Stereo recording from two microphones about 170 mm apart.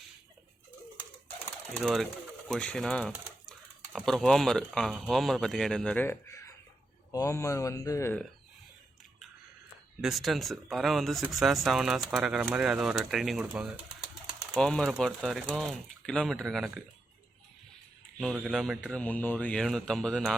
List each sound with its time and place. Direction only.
1.8 s speech: centre (ahead or behind); by 8.2 s 15° left (ahead or behind)
10.0 s speech: centre (ahead or behind)
14.5 s speech: 5° left (ahead or behind)
18.2 s speech: centre (ahead or behind)